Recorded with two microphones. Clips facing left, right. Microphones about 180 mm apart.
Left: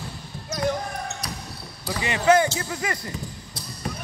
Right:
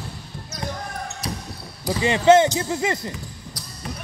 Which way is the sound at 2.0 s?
30° right (ahead or behind).